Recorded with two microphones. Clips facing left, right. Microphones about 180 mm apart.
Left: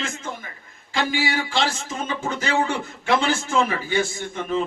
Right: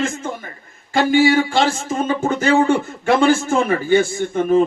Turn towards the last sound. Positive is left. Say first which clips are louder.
# right 10 dB
turn(degrees=-50)  # may be behind; listen again after turning